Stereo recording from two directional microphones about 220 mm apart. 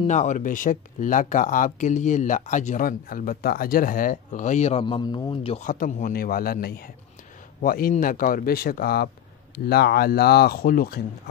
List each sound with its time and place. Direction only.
0.0 s speech: 35° left (ahead or behind)